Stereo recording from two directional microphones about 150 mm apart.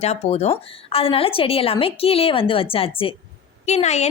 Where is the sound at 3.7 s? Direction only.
50° left (ahead or behind).